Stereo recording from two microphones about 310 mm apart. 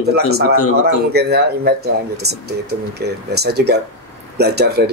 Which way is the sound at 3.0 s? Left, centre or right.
Right.